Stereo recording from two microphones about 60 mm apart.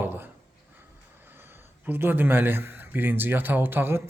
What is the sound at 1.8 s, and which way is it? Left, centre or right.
A man's voice, right.